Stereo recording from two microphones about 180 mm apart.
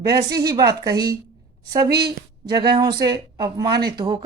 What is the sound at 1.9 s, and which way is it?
Speech, 65° right (ahead or behind).